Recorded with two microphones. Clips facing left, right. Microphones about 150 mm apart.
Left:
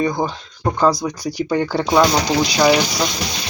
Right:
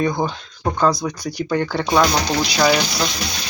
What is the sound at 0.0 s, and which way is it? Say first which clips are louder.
Speech: left 1 dB; 10° left (ahead or behind).